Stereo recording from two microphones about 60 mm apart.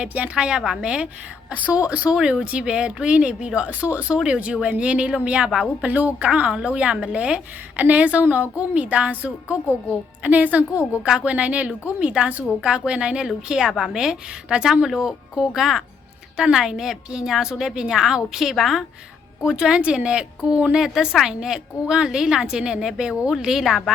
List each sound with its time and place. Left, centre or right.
0.0 s a woman's voice: centre
2.1 s a woman's voice: centre
5.8 s a woman's voice: right
11.0 s a woman's voice: centre
19.4 s a woman's voice: centre